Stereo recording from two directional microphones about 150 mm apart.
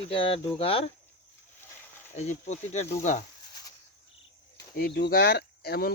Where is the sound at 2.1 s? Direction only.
50° left (ahead or behind).